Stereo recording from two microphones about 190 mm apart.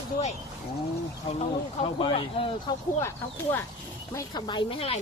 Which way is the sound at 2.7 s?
20° left (ahead or behind).